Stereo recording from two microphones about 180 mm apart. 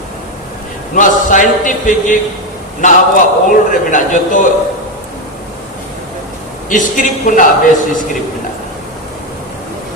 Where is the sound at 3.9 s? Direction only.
45° left (ahead or behind).